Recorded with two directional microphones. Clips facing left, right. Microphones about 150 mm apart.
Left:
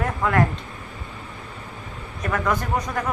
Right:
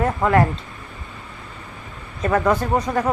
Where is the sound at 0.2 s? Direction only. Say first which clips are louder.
Right 3 dB; 20° right (ahead or behind).